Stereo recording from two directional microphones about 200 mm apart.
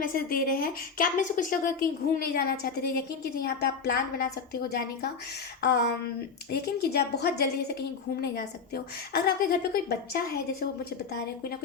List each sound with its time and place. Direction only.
0.0 s a woman's voice: 45° left (ahead or behind)
5.5 s a sound: 55° left (ahead or behind)
6.5 s a woman's voice: 55° left (ahead or behind)